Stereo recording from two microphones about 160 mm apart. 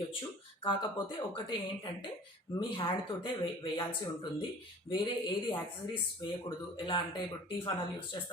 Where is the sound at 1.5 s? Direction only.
30° left (ahead or behind).